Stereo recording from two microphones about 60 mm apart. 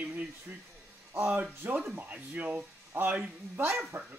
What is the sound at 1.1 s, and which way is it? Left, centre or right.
Speech, right.